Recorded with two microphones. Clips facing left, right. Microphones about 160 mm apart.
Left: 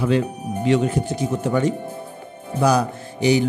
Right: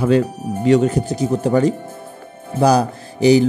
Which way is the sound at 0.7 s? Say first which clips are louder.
Right 5 dB; 40° right (ahead or behind).